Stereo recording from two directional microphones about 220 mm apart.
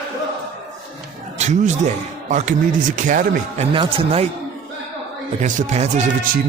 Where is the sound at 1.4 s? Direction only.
30° right (ahead or behind).